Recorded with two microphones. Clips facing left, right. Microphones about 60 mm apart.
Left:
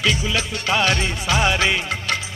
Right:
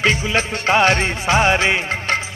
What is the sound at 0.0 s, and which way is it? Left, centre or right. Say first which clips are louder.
Music: right 4 dB; right.